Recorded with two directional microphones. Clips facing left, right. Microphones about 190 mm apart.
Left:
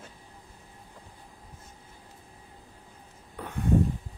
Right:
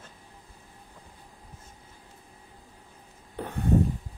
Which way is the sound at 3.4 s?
35° right (ahead or behind).